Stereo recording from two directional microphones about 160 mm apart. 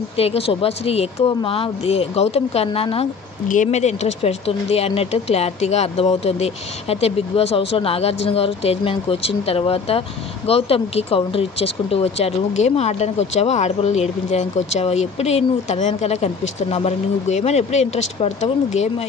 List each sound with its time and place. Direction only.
0.2 s speech: 35° left (ahead or behind)
3.4 s speech: 50° left (ahead or behind)